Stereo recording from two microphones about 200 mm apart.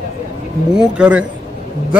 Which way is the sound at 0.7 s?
5° right (ahead or behind).